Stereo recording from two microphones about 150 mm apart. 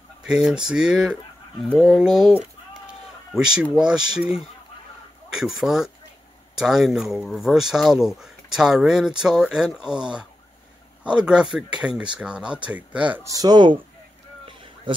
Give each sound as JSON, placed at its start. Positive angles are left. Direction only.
{"t": 0.2, "sound": "speech", "side_deg": -5}
{"t": 3.3, "sound": "speech", "side_deg": -5}
{"t": 13.2, "sound": "speech", "side_deg": -25}
{"t": 14.9, "sound": "a sound", "side_deg": -35}